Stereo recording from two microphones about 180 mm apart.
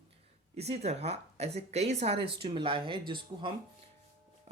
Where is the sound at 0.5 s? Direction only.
35° right (ahead or behind).